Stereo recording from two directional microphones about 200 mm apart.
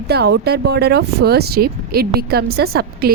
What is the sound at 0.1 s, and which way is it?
A woman's voice, 55° right (ahead or behind).